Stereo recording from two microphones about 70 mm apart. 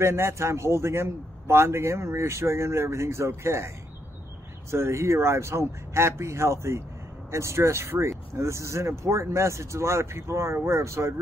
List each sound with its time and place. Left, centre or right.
0.0 s a man's voice: right